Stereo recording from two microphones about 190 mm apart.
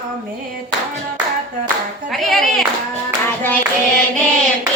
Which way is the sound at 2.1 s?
Centre (ahead or behind).